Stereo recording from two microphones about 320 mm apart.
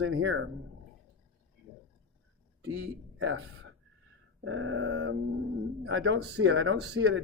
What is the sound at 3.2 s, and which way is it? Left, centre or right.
Speech, right.